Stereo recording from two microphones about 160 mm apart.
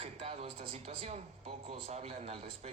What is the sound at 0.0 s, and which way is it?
A man's voice, 40° right (ahead or behind).